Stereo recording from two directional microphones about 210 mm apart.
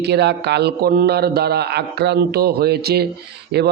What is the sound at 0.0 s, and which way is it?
Speech, 50° right (ahead or behind).